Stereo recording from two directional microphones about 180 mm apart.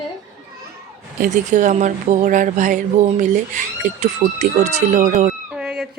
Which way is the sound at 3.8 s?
40° right (ahead or behind).